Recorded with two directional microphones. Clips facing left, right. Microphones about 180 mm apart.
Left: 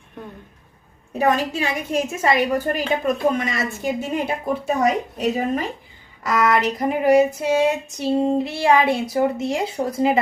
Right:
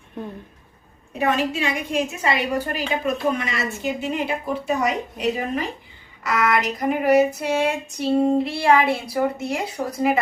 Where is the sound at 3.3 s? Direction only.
45° left (ahead or behind).